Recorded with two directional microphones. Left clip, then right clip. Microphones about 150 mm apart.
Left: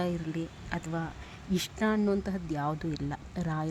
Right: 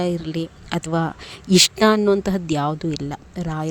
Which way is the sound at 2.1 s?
45° right (ahead or behind).